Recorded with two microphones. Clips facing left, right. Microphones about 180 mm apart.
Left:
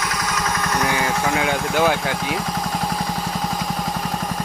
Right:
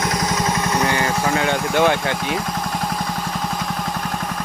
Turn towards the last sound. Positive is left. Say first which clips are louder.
# even
turn(degrees=0)  # may be behind; listen again after turning